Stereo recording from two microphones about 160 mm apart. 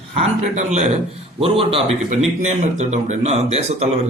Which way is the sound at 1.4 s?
35° right (ahead or behind).